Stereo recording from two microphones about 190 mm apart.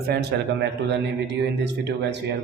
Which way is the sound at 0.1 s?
60° right (ahead or behind).